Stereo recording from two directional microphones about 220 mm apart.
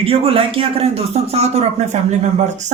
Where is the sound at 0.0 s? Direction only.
25° right (ahead or behind).